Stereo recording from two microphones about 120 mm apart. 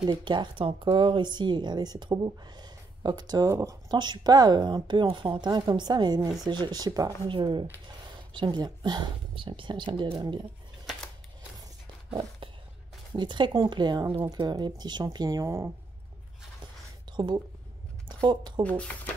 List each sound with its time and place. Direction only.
0.0 s speech: 40° right (ahead or behind)
7.2 s speech: 45° right (ahead or behind)
13.1 s speech: 40° right (ahead or behind); by 15.7 s 25° right (ahead or behind)
17.1 s a woman's voice: 40° right (ahead or behind)
18.6 s speech: 10° left (ahead or behind)